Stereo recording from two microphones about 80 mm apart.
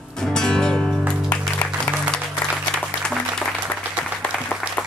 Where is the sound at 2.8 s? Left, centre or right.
Centre.